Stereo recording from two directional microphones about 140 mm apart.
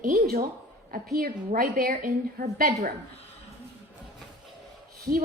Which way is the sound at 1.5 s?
90° right.